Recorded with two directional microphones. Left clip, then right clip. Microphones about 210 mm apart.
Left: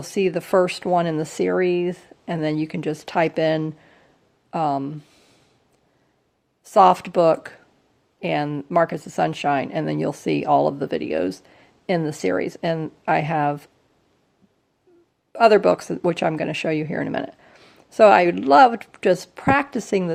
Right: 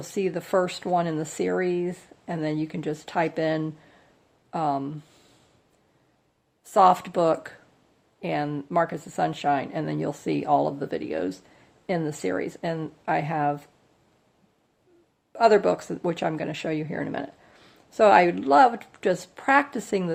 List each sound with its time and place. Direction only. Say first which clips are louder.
0.0 s speech: left 6 dB; 35° left (ahead or behind)
6.7 s speech: left 4 dB; 30° left (ahead or behind)
15.3 s speech: left 4 dB; 35° left (ahead or behind)